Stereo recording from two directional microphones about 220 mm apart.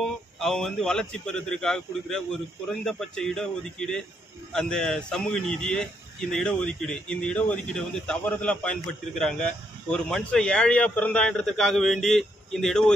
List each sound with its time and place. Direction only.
0.0 s a man's voice: centre (ahead or behind)